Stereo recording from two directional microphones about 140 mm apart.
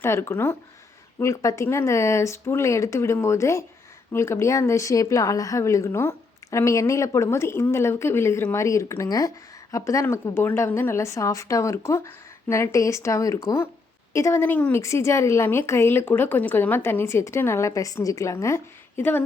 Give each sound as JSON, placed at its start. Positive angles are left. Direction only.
{"t": 0.0, "sound": "speech", "side_deg": 20}